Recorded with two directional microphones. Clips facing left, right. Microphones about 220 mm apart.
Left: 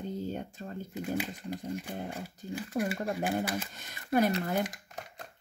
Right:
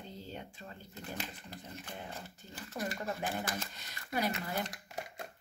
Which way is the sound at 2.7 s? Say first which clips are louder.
Left 6 dB; 30° left (ahead or behind).